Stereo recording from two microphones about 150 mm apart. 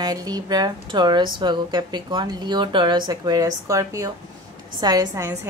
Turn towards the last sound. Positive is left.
turn(degrees=-20)  # may be behind; listen again after turning